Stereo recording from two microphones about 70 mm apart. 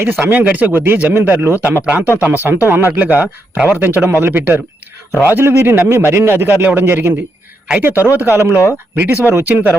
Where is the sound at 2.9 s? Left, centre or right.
Right.